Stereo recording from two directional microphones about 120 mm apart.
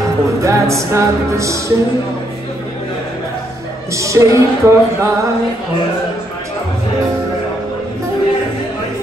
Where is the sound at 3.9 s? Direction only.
25° right (ahead or behind).